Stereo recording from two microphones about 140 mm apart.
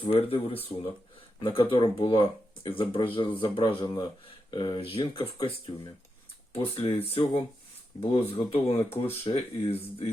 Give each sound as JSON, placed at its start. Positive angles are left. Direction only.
{"t": 0.0, "sound": "speech", "side_deg": 40}